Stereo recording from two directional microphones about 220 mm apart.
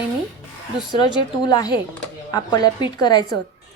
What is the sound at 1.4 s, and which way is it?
A woman's voice, 20° left (ahead or behind).